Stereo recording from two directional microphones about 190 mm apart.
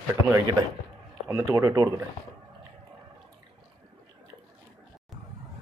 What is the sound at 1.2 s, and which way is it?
Speech, 15° right (ahead or behind).